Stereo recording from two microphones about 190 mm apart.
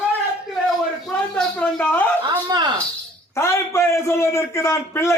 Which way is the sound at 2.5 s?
20° right (ahead or behind).